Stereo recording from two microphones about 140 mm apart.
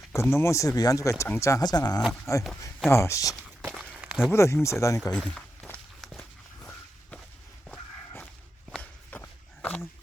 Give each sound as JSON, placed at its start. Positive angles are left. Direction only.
{"t": 0.1, "sound": "speech", "side_deg": 20}
{"t": 3.9, "sound": "a sound", "side_deg": -5}
{"t": 4.3, "sound": "speech", "side_deg": 20}
{"t": 5.1, "sound": "walk", "side_deg": 10}
{"t": 8.7, "sound": "walk", "side_deg": 10}